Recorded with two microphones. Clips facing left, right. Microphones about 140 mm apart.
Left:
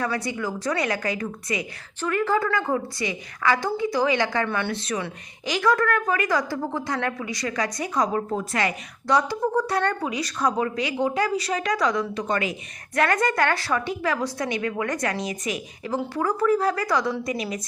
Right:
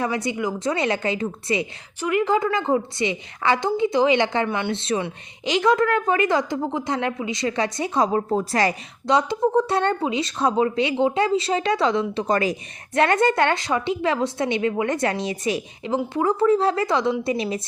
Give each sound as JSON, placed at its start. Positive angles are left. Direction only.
{"t": 0.0, "sound": "a woman's voice", "side_deg": -20}
{"t": 2.0, "sound": "a woman's voice", "side_deg": -15}
{"t": 9.0, "sound": "a woman's voice", "side_deg": -20}
{"t": 12.9, "sound": "a woman's voice", "side_deg": -25}